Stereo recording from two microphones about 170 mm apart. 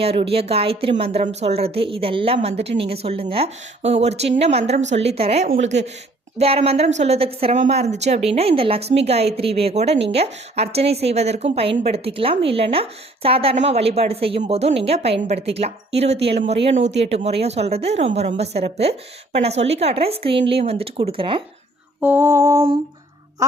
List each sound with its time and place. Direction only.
0.0 s a woman's voice: 35° right (ahead or behind)
22.0 s lullaby: 15° right (ahead or behind)
23.4 s quack: 20° right (ahead or behind)